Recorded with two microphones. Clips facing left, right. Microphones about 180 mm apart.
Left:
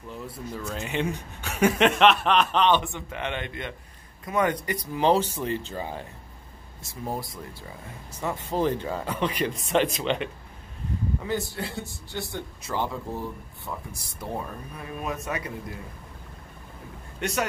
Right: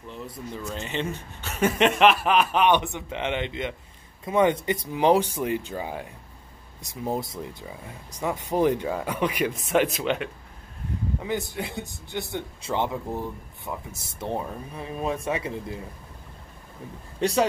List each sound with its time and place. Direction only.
0.7 s speech: 5° left (ahead or behind)
1.8 s speech: centre (ahead or behind)
11.2 s speech: 15° right (ahead or behind)
17.2 s speech: 30° right (ahead or behind)